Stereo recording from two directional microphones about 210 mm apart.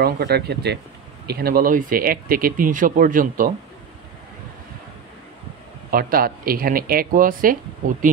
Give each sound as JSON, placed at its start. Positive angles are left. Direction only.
{"t": 0.0, "sound": "speech", "side_deg": -50}
{"t": 5.9, "sound": "speech", "side_deg": -45}